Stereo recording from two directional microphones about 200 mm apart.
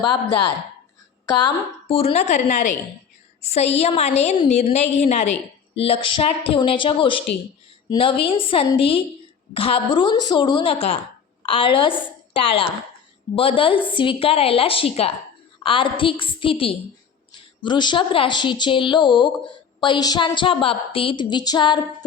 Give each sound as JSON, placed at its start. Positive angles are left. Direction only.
{"t": 1.4, "sound": "a woman's voice", "side_deg": 25}
{"t": 13.3, "sound": "a woman's voice", "side_deg": 25}